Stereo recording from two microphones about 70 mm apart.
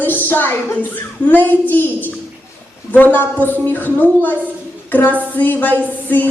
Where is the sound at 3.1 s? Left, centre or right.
Left.